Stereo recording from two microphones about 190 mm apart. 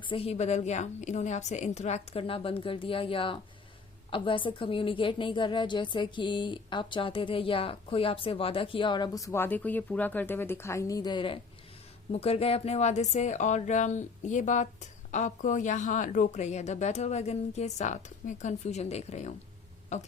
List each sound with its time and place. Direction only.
0.1 s a woman's voice: 30° left (ahead or behind)